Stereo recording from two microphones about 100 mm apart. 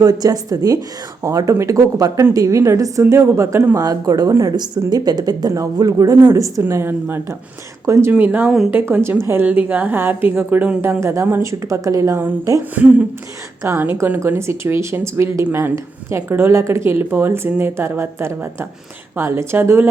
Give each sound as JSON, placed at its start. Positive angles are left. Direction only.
{"t": 0.0, "sound": "a woman's voice", "side_deg": -40}
{"t": 3.8, "sound": "a woman's voice", "side_deg": -40}
{"t": 11.0, "sound": "a woman's voice", "side_deg": -25}
{"t": 12.8, "sound": "speech", "side_deg": -15}